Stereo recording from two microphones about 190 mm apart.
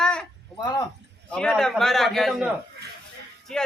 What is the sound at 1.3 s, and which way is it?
Speech, 5° left (ahead or behind).